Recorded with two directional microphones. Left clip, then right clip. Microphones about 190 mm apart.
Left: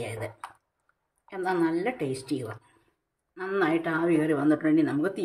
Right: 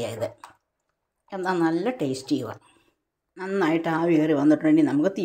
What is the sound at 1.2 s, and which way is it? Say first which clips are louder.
Speech: right 3 dB; 25° right (ahead or behind).